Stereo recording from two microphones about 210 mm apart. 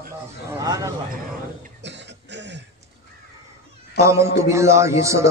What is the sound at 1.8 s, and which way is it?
Throat clearing, 55° right (ahead or behind).